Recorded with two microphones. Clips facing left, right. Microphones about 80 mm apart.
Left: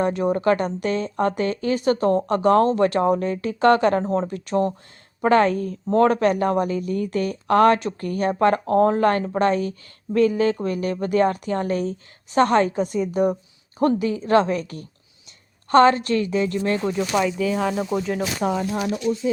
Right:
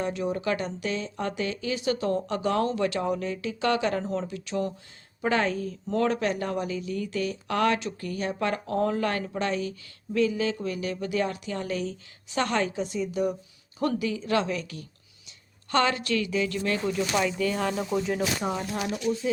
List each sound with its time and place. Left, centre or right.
0.0 s speech: left
17.2 s speech: centre